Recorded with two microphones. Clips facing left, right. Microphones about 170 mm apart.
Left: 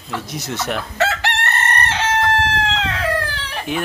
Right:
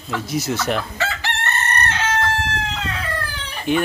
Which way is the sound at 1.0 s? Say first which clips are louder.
Left 5 dB; 70° left (ahead or behind).